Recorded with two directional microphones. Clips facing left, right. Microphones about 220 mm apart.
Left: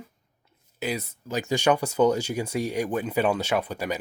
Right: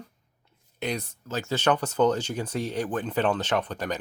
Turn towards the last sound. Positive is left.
turn(degrees=10)  # may be behind; listen again after turning